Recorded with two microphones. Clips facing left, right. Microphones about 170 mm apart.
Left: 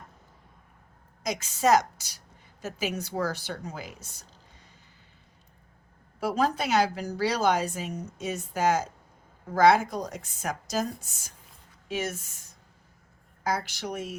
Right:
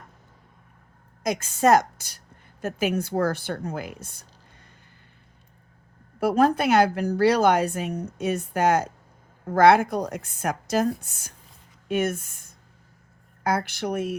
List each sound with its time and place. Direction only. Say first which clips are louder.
1.2 s a woman's voice: right 5 dB; 50° right (ahead or behind)
6.1 s speech: right 6 dB; 55° right (ahead or behind)